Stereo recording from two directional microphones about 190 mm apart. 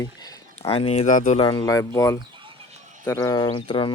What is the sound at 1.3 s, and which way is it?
Speech, 25° left (ahead or behind).